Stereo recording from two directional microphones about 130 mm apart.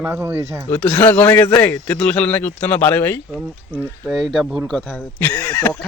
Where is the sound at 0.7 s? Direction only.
10° left (ahead or behind).